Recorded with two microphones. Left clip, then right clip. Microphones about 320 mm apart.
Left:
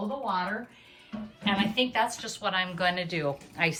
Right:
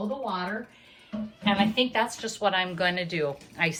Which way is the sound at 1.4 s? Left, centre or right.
Centre.